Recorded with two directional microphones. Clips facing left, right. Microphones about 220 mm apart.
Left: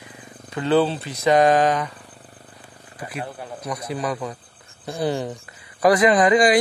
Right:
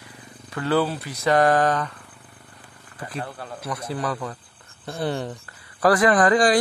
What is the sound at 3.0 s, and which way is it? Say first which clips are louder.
Speech: left 1 dB; 15° left (ahead or behind).